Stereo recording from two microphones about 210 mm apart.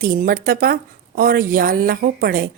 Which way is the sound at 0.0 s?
40° right (ahead or behind).